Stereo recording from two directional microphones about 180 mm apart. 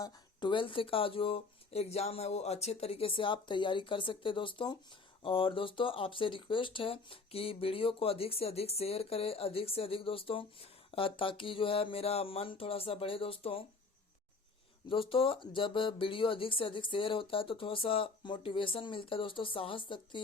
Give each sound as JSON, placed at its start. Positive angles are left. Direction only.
{"t": 0.0, "sound": "speech", "side_deg": 25}
{"t": 14.8, "sound": "speech", "side_deg": 30}